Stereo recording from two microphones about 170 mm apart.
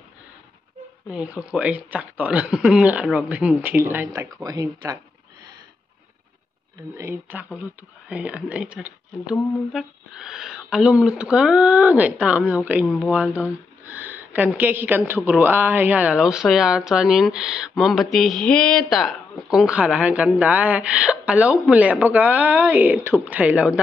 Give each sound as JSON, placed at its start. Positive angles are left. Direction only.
{"t": 1.1, "sound": "a woman's voice", "side_deg": -5}
{"t": 7.0, "sound": "a woman's voice", "side_deg": -15}
{"t": 12.8, "sound": "speech", "side_deg": 10}
{"t": 13.1, "sound": "a woman's voice", "side_deg": -10}